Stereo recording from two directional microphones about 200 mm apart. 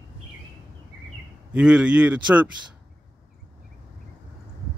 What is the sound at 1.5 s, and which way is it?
Speech, 5° right (ahead or behind).